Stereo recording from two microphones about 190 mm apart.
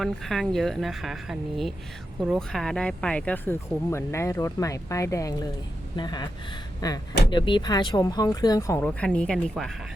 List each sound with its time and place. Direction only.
0.0 s speech: centre (ahead or behind)